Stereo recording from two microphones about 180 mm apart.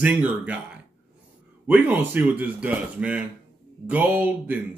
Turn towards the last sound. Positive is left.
turn(degrees=-10)  # may be behind; listen again after turning